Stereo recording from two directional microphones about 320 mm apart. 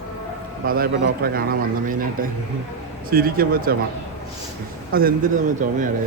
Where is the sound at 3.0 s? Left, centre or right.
Right.